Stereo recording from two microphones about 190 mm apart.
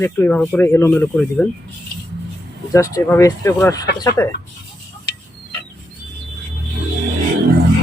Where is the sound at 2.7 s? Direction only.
15° left (ahead or behind).